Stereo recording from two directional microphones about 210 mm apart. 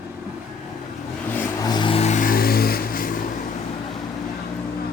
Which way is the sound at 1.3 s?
10° left (ahead or behind).